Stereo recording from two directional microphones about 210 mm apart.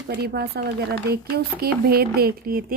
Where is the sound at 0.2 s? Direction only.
50° right (ahead or behind).